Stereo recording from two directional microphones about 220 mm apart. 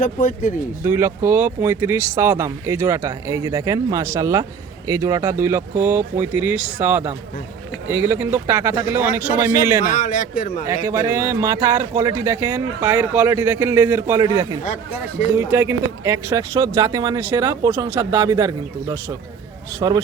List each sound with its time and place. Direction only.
0.0 s a man's voice: 35° left (ahead or behind)
0.9 s speech: 10° right (ahead or behind)
9.8 s a man's voice: 35° left (ahead or behind)
10.8 s speech: 10° right (ahead or behind)
15.4 s speech: 10° right (ahead or behind)